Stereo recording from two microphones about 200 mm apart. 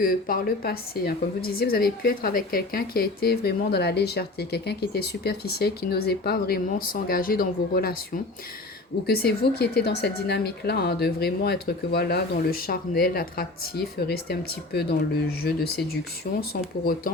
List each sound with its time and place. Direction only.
0.0 s speech: 45° left (ahead or behind)
9.0 s speech: 50° left (ahead or behind)